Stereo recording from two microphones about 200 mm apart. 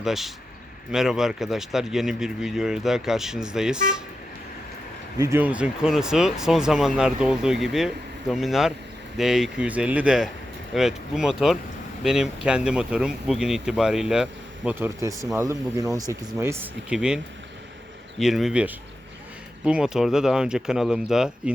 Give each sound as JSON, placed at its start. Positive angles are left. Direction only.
{"t": 0.0, "sound": "speech", "side_deg": 0}
{"t": 5.1, "sound": "speech", "side_deg": -15}
{"t": 18.2, "sound": "speech", "side_deg": 0}